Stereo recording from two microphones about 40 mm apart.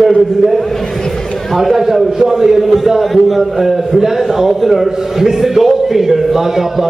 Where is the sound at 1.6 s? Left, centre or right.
Centre.